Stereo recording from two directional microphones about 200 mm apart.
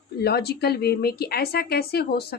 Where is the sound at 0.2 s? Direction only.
55° left (ahead or behind).